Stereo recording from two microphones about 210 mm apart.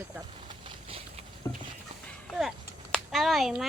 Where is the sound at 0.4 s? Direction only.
25° right (ahead or behind).